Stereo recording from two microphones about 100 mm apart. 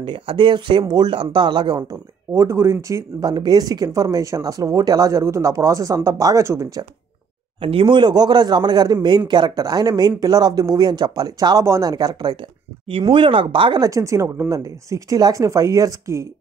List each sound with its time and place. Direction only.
0.0 s speech: 55° right (ahead or behind); by 6.8 s 30° right (ahead or behind)
7.6 s speech: 60° right (ahead or behind); by 12.4 s 45° right (ahead or behind)
12.9 s speech: 60° right (ahead or behind)
13.8 s speech: 30° right (ahead or behind)